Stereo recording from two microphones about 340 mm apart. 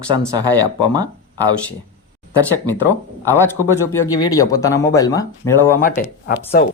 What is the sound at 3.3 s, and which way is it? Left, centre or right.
Speech, centre.